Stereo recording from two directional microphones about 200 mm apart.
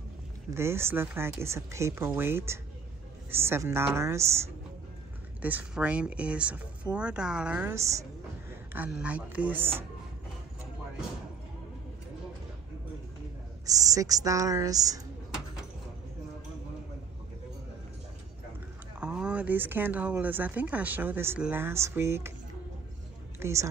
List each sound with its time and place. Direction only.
0.6 s speech: 10° right (ahead or behind)
13.7 s speech: 15° right (ahead or behind)
18.9 s speech: 5° right (ahead or behind)
23.4 s speech: 15° right (ahead or behind)